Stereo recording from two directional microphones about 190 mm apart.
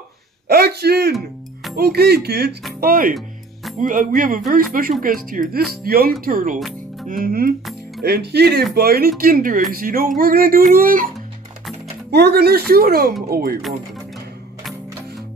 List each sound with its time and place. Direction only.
0.5 s speech: 55° right (ahead or behind)
1.1 s music: centre (ahead or behind)
1.8 s speech: 55° right (ahead or behind)
12.1 s speech: 55° right (ahead or behind)